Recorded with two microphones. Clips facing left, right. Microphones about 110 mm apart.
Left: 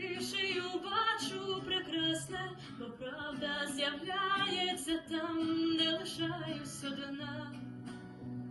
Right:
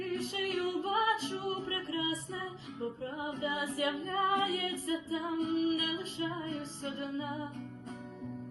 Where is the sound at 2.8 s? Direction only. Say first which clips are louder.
Right 6 dB; 25° right (ahead or behind).